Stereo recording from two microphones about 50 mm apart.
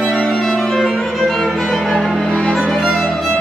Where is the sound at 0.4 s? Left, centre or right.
Centre.